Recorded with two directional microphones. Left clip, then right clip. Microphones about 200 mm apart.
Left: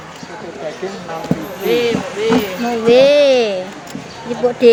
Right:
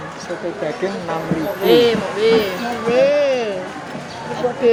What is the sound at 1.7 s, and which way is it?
Speech, 30° right (ahead or behind).